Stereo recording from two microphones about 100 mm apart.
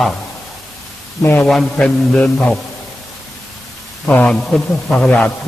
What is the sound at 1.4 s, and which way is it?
A man's voice, 5° left (ahead or behind).